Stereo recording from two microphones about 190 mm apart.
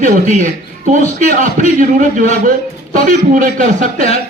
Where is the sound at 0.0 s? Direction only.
40° right (ahead or behind).